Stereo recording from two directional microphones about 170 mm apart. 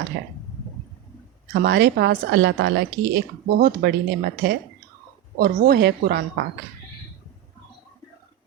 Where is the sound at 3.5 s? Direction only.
75° right (ahead or behind).